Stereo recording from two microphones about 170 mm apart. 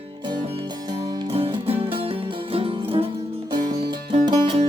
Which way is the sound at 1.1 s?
30° right (ahead or behind).